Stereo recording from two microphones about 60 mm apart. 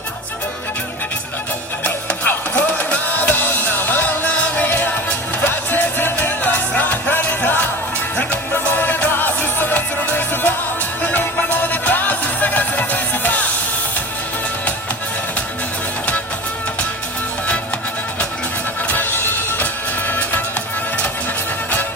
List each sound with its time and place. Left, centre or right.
1.8 s music: left
18.9 s music: left